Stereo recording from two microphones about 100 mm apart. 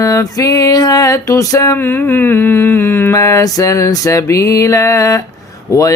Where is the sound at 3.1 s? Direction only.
35° left (ahead or behind).